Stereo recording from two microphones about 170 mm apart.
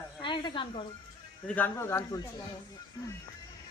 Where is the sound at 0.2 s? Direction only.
30° left (ahead or behind).